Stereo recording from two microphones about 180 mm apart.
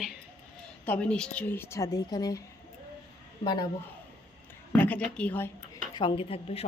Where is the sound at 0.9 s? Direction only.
5° left (ahead or behind); by 2.4 s 20° left (ahead or behind).